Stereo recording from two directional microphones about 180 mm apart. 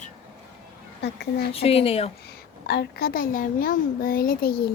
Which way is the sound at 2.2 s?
60° left (ahead or behind).